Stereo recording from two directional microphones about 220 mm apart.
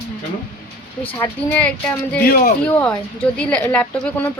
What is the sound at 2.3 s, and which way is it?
Speech, 40° left (ahead or behind).